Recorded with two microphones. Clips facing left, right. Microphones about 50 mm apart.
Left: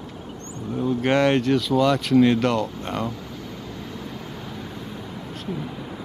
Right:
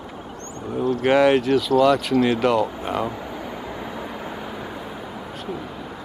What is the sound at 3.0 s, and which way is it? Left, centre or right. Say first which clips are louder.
Vehicle: right 3 dB; centre.